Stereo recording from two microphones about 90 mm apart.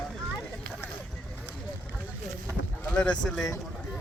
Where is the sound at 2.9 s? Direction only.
10° left (ahead or behind).